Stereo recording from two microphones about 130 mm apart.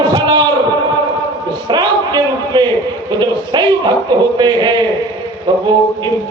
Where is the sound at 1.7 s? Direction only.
35° right (ahead or behind).